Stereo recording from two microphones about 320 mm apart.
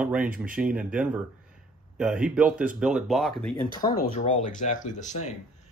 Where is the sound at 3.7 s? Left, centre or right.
Centre.